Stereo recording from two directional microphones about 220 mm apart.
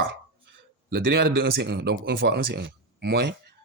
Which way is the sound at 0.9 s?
45° right (ahead or behind).